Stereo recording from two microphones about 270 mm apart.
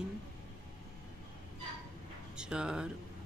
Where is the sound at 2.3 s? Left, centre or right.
Centre.